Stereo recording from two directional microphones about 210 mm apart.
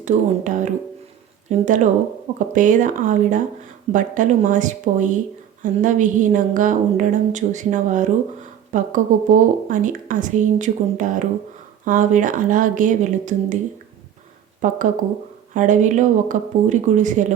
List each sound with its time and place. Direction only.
0.0 s speech: 35° right (ahead or behind)
14.6 s speech: 40° right (ahead or behind)